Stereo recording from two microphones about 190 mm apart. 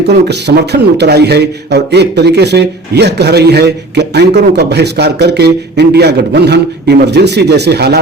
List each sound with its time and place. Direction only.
0.3 s speech: 60° right (ahead or behind)